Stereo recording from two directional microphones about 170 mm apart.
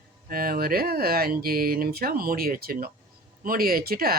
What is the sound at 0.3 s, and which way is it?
Speech, 55° right (ahead or behind).